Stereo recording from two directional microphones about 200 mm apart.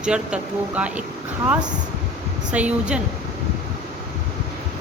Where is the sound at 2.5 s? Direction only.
5° right (ahead or behind).